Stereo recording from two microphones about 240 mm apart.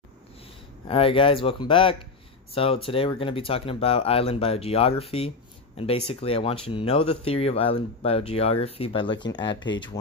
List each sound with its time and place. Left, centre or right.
0.8 s speech: left